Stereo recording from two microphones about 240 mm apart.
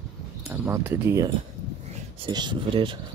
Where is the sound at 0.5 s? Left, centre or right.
Centre.